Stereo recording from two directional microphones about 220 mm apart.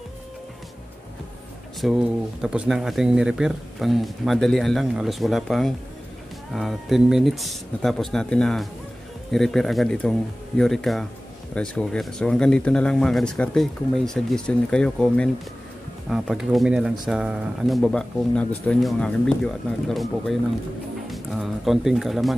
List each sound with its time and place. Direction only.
1.8 s speech: centre (ahead or behind)